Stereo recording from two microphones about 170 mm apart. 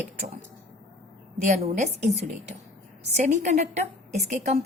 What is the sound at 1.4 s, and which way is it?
A woman's voice, 45° right (ahead or behind).